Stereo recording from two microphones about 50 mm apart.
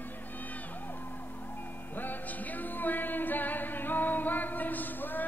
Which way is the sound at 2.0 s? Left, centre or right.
Left.